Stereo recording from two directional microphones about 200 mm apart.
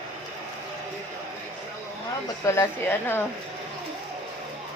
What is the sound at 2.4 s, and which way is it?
Speech, 15° left (ahead or behind).